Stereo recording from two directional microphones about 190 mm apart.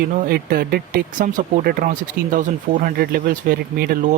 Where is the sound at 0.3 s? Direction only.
50° right (ahead or behind).